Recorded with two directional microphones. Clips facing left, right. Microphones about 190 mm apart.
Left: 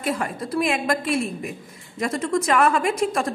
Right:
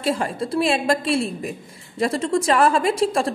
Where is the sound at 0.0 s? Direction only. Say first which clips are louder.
Right 3 dB; 30° right (ahead or behind).